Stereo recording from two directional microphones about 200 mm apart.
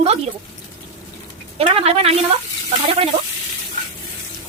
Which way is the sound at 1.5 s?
30° right (ahead or behind).